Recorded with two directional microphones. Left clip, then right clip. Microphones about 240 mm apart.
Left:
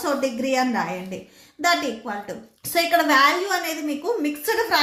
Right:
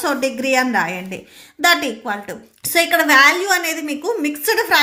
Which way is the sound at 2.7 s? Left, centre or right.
Right.